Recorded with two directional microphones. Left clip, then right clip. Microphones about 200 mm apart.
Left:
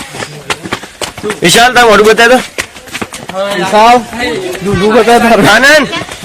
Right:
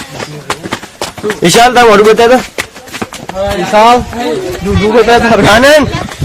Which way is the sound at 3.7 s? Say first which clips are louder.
Even; 50° left (ahead or behind).